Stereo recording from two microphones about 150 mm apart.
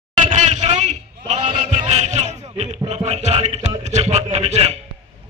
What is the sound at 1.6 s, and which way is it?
Music, 50° right (ahead or behind).